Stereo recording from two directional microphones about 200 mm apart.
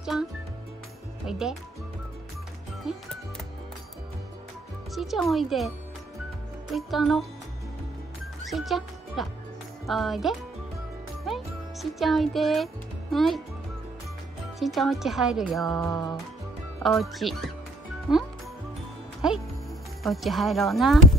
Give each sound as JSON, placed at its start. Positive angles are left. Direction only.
{"t": 0.0, "sound": "music", "side_deg": -5}
{"t": 1.2, "sound": "speech", "side_deg": 0}
{"t": 2.8, "sound": "speech", "side_deg": 0}
{"t": 4.9, "sound": "speech", "side_deg": 0}
{"t": 6.7, "sound": "speech", "side_deg": 0}
{"t": 8.5, "sound": "speech", "side_deg": 0}
{"t": 11.2, "sound": "music", "side_deg": 0}
{"t": 13.1, "sound": "speech", "side_deg": 0}
{"t": 14.6, "sound": "speech", "side_deg": 0}
{"t": 15.8, "sound": "music", "side_deg": 20}
{"t": 16.8, "sound": "speech", "side_deg": 0}
{"t": 20.0, "sound": "speech", "side_deg": 0}